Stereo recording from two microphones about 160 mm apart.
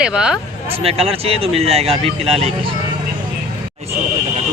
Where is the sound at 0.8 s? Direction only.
40° right (ahead or behind).